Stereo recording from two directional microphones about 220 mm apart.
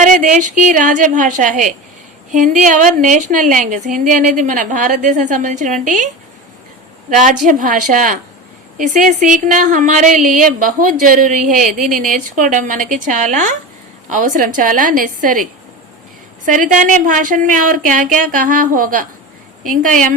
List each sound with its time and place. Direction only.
0.0 s a woman's voice: 35° right (ahead or behind)
7.1 s a woman's voice: 35° right (ahead or behind)
16.5 s a woman's voice: 35° right (ahead or behind)